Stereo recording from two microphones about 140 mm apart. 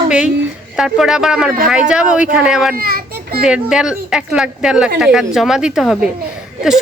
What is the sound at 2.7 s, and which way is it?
Children playing, 90° right.